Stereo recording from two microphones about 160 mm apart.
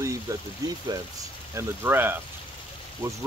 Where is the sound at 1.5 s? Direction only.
15° right (ahead or behind).